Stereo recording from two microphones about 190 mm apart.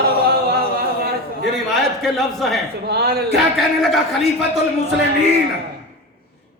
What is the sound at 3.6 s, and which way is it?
Speech, centre (ahead or behind).